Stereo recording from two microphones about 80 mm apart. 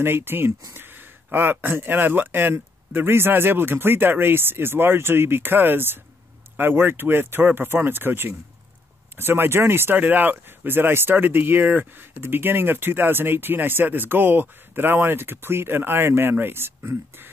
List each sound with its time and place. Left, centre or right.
0.0 s speech: right